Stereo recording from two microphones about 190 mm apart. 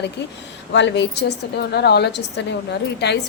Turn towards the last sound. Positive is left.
turn(degrees=60)  # may be behind; listen again after turning